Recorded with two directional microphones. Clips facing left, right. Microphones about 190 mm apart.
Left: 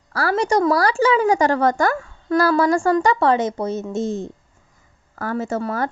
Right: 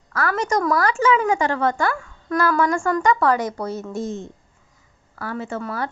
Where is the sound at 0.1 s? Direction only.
35° left (ahead or behind).